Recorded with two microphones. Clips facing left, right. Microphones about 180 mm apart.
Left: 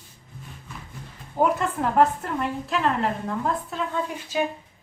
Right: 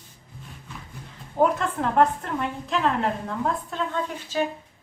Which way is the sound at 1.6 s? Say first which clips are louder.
Left 1 dB; 5° left (ahead or behind).